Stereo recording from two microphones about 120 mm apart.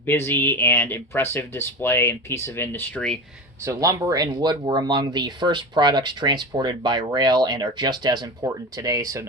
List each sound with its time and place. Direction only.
0.0 s speech: 15° left (ahead or behind)
3.6 s speech: 25° right (ahead or behind)